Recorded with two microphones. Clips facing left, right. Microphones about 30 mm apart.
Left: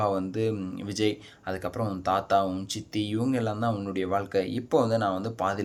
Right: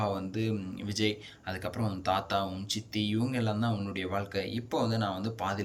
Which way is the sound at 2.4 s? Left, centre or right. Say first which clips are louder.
Left 5 dB; centre.